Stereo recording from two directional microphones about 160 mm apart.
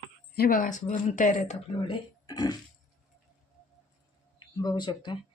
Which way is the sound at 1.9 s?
25° left (ahead or behind).